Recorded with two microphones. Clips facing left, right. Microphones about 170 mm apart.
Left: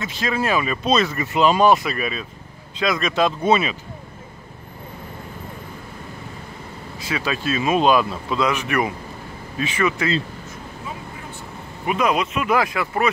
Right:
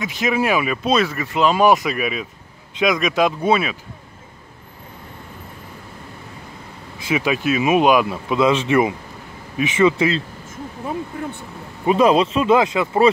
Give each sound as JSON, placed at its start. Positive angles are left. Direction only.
{"t": 0.0, "sound": "speech", "side_deg": -15}
{"t": 1.7, "sound": "speech", "side_deg": -15}
{"t": 7.1, "sound": "speech", "side_deg": -15}
{"t": 11.8, "sound": "speech", "side_deg": -30}